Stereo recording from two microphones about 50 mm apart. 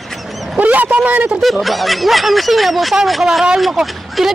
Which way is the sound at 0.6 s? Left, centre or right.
Right.